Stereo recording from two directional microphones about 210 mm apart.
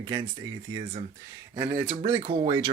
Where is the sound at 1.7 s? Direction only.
15° right (ahead or behind).